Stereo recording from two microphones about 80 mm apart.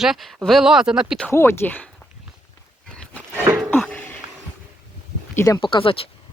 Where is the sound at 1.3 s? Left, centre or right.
Left.